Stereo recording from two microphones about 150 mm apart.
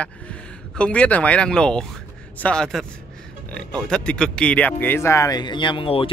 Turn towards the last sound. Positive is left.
turn(degrees=35)  # may be behind; listen again after turning